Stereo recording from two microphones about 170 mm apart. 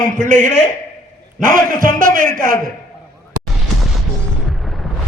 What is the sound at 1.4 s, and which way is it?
A man's voice, 55° right (ahead or behind).